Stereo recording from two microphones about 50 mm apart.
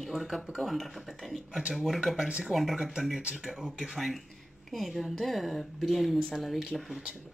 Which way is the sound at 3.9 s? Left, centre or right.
Centre.